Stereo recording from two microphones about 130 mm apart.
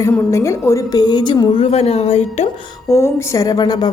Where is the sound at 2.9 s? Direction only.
20° left (ahead or behind).